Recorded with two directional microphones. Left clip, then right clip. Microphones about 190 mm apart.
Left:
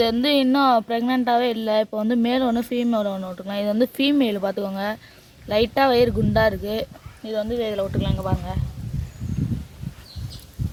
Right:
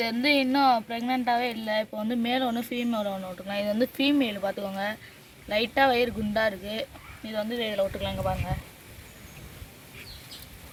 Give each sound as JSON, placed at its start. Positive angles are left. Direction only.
{"t": 0.0, "sound": "speech", "side_deg": 45}